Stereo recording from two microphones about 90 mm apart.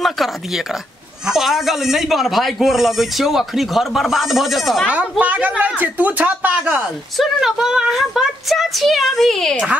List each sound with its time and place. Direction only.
1.2 s speech: 5° right (ahead or behind)
5.2 s speech: 15° right (ahead or behind)
7.2 s speech: 5° right (ahead or behind)